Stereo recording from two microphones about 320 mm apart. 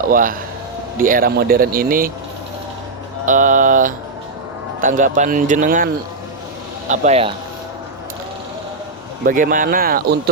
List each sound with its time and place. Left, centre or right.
0.1 s speech: right
3.2 s speech: right
9.2 s speech: right